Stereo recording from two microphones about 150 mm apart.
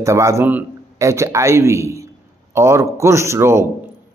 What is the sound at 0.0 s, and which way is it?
Speech, 20° right (ahead or behind).